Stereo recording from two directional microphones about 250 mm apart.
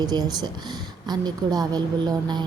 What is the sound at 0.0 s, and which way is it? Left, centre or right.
A woman's voice, centre.